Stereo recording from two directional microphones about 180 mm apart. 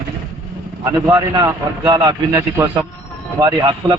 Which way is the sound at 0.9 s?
20° right (ahead or behind).